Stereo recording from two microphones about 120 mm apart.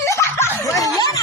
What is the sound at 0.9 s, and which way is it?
Snicker, 30° left (ahead or behind).